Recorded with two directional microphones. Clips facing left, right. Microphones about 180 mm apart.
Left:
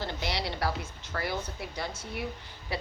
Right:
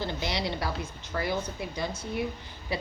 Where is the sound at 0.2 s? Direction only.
20° right (ahead or behind).